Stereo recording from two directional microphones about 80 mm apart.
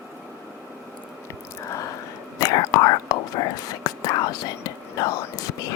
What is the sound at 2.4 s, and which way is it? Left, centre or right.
Whispering, left.